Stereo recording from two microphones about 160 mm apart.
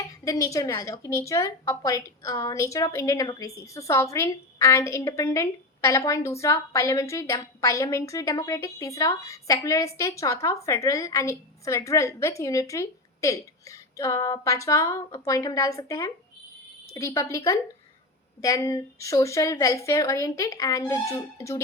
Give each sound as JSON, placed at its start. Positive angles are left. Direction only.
{"t": 0.3, "sound": "a woman's voice", "side_deg": 20}